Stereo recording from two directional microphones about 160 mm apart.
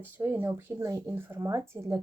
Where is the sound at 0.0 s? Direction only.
15° right (ahead or behind).